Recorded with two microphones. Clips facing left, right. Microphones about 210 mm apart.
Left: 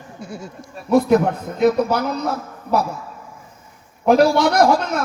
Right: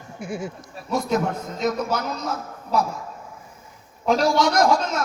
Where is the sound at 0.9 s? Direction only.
60° left (ahead or behind).